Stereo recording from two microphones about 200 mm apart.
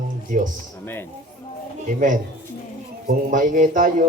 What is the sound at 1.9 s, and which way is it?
Speech, 40° right (ahead or behind).